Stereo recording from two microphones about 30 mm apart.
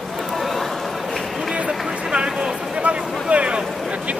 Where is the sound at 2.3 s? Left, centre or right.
Right.